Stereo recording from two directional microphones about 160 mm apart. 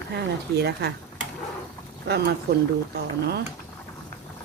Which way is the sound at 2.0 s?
90° right.